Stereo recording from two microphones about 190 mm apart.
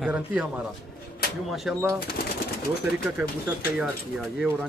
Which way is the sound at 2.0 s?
55° left (ahead or behind).